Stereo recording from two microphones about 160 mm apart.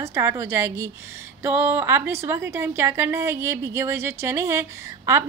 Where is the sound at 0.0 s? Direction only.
20° right (ahead or behind).